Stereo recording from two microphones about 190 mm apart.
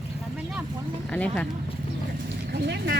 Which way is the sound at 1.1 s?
5° left (ahead or behind).